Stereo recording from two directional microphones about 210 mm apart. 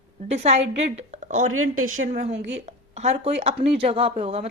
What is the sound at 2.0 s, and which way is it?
Speech, 35° right (ahead or behind).